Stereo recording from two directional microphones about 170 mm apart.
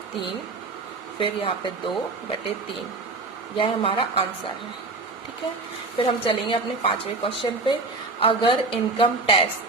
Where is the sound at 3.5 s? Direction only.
30° left (ahead or behind).